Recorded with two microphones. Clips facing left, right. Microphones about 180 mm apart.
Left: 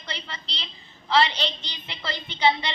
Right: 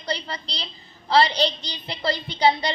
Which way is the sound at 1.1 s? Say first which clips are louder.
Right 3 dB; 35° right (ahead or behind).